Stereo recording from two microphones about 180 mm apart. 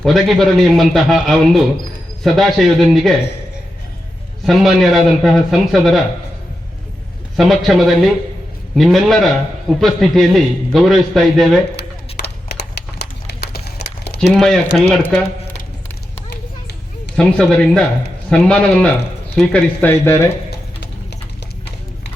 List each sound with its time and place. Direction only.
0.0 s a man's voice: centre (ahead or behind)
4.4 s a man's voice: centre (ahead or behind)
7.3 s a man's voice: centre (ahead or behind)
12.1 s a sound: 65° left (ahead or behind)
14.3 s a man's voice: 5° left (ahead or behind)
17.2 s a man's voice: 5° left (ahead or behind)